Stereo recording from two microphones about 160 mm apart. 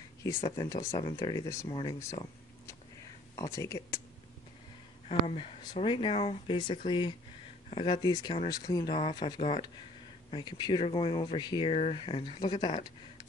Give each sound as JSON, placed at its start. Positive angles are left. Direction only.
{"t": 0.4, "sound": "speech", "side_deg": 30}
{"t": 0.7, "sound": "speech", "side_deg": 20}
{"t": 3.3, "sound": "speech", "side_deg": 20}
{"t": 5.0, "sound": "speech", "side_deg": 35}